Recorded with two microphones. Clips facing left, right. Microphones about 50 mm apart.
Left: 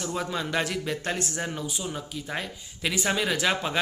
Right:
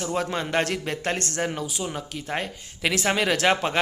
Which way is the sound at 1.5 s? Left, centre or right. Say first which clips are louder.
Right 2 dB; right.